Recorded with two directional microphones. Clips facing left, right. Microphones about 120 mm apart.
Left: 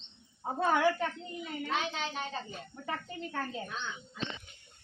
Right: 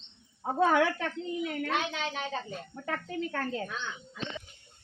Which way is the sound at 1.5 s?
90° right.